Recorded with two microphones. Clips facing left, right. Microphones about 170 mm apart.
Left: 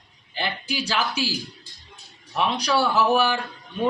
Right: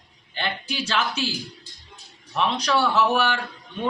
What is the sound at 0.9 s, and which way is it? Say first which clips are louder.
Speech: right 1 dB; 10° left (ahead or behind).